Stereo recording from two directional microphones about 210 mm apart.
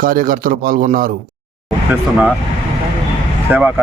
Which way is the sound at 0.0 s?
40° right (ahead or behind).